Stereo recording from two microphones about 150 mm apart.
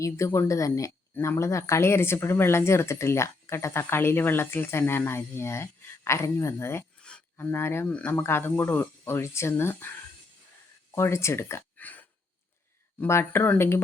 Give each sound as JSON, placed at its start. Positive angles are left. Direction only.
{"t": 0.0, "sound": "speech", "side_deg": 20}
{"t": 10.9, "sound": "speech", "side_deg": 20}